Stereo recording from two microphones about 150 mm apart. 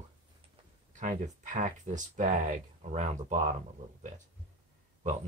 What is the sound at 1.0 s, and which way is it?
Speech, 55° right (ahead or behind).